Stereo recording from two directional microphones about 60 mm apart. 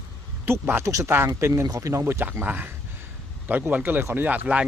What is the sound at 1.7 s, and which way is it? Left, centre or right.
Speech, right.